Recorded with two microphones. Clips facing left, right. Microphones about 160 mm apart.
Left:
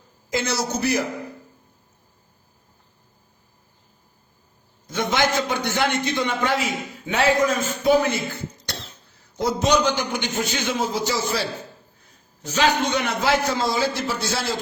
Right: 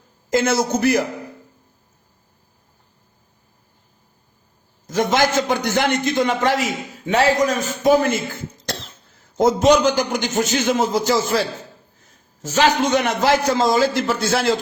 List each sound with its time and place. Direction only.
0.3 s a man's voice: 50° right (ahead or behind)
4.9 s a man's voice: 45° right (ahead or behind)
8.7 s cough: 50° left (ahead or behind)
9.4 s a man's voice: 50° right (ahead or behind)
12.5 s a man's voice: 40° right (ahead or behind)